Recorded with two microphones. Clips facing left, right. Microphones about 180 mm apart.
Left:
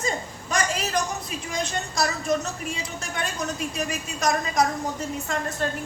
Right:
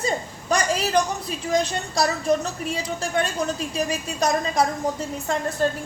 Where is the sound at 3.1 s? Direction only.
35° right (ahead or behind).